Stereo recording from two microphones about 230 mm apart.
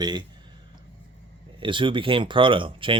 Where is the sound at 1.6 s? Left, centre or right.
Right.